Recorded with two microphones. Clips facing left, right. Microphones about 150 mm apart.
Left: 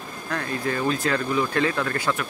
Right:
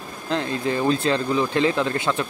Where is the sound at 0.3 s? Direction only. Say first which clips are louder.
Right 4 dB; 20° right (ahead or behind).